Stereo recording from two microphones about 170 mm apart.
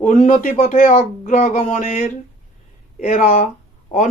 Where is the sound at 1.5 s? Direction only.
45° left (ahead or behind).